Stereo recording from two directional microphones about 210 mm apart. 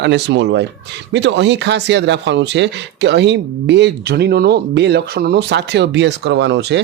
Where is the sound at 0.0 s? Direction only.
55° right (ahead or behind).